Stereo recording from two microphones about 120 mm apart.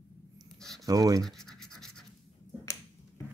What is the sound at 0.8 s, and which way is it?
Speech, 30° right (ahead or behind).